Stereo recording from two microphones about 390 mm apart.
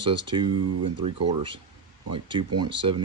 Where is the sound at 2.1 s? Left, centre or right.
Centre.